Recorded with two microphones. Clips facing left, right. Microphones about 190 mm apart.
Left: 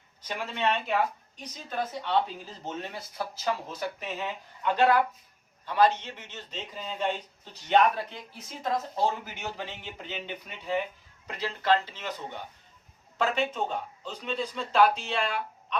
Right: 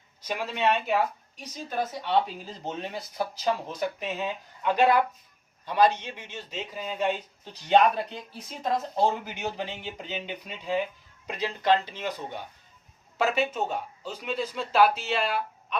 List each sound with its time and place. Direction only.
0.3 s speech: 10° right (ahead or behind)
8.6 s speech: 20° right (ahead or behind)